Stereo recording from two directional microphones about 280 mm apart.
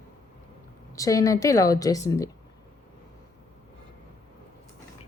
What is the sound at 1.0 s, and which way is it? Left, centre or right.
Speech, centre.